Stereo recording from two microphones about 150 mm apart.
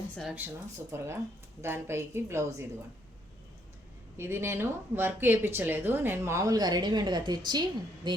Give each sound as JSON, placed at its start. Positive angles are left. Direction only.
{"t": 0.3, "sound": "speech", "side_deg": -15}
{"t": 4.2, "sound": "speech", "side_deg": -15}